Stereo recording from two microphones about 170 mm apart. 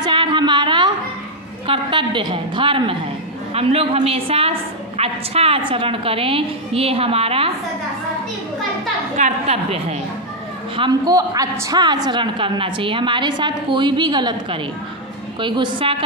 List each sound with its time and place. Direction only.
0.0 s a sound: 30° right (ahead or behind)
1.7 s a woman's voice: 30° right (ahead or behind)
9.1 s a woman's voice: 40° right (ahead or behind)
10.8 s a woman's voice: 20° right (ahead or behind)